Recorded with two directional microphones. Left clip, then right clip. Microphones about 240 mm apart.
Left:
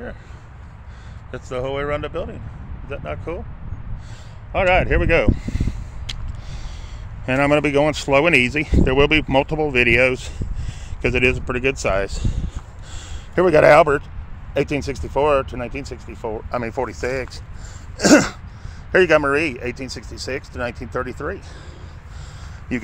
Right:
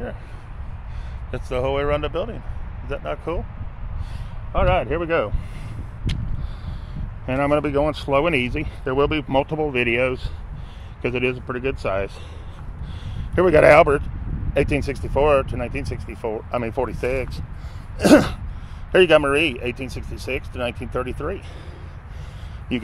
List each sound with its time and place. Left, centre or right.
1.3 s speech: centre
4.5 s speech: centre
7.2 s speech: left; by 17.5 s centre
17.9 s throat clearing: centre
18.9 s speech: centre